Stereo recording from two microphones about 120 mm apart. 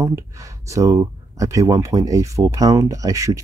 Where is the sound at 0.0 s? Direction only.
25° right (ahead or behind).